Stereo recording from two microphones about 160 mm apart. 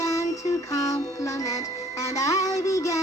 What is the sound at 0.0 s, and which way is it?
Music, 20° left (ahead or behind).